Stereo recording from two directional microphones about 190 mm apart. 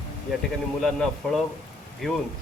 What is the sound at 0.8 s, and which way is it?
Speech, centre (ahead or behind).